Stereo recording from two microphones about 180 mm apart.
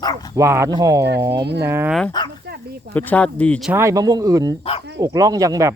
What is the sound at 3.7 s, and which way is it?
Speech, 15° right (ahead or behind).